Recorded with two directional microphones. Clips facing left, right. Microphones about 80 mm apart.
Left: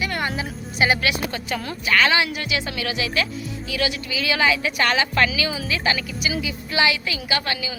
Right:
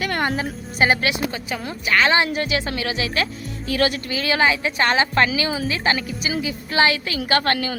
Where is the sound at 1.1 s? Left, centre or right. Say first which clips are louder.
Right 1 dB; centre; by 3.2 s right.